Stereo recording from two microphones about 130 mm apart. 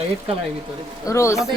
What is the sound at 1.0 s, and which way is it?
Speech, 25° left (ahead or behind).